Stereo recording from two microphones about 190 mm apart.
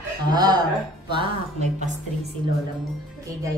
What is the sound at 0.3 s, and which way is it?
Speech, 20° right (ahead or behind).